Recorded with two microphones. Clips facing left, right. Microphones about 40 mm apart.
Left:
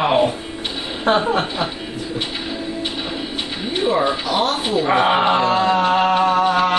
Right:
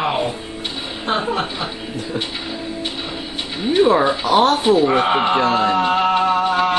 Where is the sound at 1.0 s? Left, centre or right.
Left.